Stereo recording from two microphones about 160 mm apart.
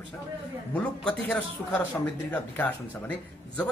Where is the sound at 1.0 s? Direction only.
5° left (ahead or behind).